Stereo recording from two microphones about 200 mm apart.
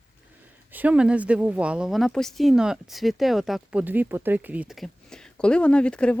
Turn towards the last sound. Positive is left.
turn(degrees=5)  # may be behind; listen again after turning